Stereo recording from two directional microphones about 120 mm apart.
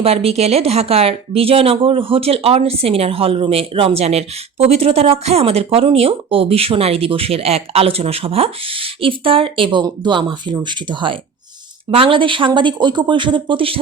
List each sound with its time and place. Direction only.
0.0 s speech: 55° right (ahead or behind)